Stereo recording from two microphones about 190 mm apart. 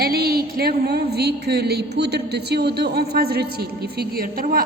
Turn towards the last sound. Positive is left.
turn(degrees=-50)  # may be behind; listen again after turning